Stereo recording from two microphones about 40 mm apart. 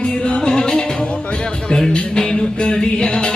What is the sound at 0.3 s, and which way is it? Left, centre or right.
Music, centre.